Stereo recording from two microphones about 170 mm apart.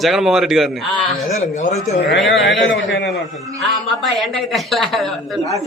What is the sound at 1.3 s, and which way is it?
Speech, 45° left (ahead or behind).